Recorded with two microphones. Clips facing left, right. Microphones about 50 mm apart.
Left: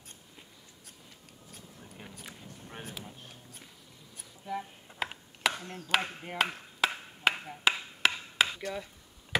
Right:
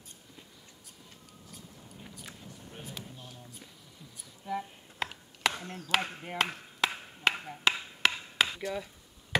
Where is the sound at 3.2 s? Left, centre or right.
Left.